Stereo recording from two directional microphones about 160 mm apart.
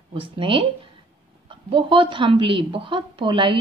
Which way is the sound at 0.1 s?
35° right (ahead or behind).